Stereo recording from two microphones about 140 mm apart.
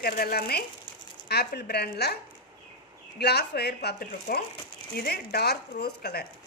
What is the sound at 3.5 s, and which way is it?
A woman's voice, 90° left.